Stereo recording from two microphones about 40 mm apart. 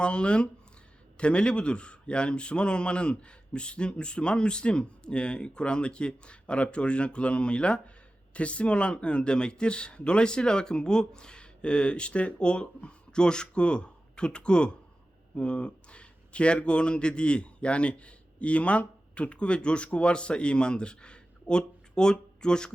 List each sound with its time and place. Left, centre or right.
0.0 s a man's voice: left